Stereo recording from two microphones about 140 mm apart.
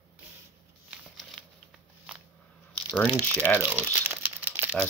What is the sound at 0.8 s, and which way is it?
Shuffling cards, centre (ahead or behind).